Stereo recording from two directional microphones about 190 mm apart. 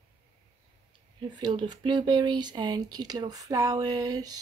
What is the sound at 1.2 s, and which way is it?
Speech, 25° right (ahead or behind).